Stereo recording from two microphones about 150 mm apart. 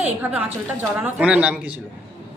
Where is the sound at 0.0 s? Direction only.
10° right (ahead or behind).